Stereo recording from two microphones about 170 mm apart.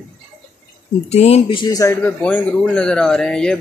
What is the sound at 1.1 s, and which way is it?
A man's voice, 40° left (ahead or behind).